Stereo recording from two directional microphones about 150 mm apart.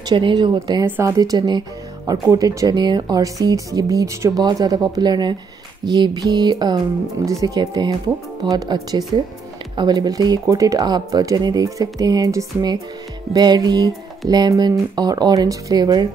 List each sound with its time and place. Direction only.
0.1 s a woman's voice: 30° right (ahead or behind)
0.8 s speech: 15° right (ahead or behind)